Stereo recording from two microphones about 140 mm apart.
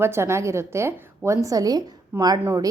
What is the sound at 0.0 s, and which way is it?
A woman's voice, 20° right (ahead or behind).